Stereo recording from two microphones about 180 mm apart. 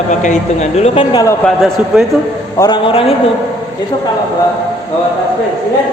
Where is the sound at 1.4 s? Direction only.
Centre (ahead or behind).